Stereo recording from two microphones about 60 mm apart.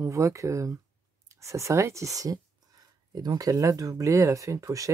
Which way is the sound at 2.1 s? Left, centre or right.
Right.